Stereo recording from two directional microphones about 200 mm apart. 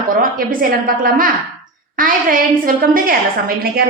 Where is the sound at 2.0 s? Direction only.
45° right (ahead or behind).